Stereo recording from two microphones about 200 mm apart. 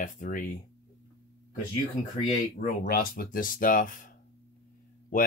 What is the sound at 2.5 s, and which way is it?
Speech, 45° left (ahead or behind).